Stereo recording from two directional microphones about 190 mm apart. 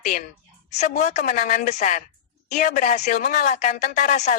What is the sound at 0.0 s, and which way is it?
A woman's voice, 40° left (ahead or behind).